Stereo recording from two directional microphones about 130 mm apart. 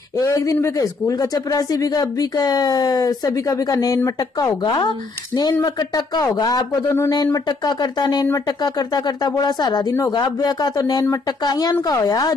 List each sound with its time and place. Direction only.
0.2 s a man's voice: 25° left (ahead or behind)